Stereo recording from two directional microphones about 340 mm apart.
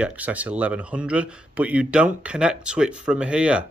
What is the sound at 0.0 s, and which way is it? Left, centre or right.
A man's voice, centre.